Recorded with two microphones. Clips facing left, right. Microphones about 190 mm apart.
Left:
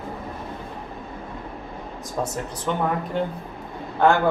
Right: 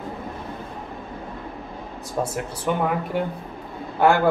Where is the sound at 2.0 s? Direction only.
10° right (ahead or behind).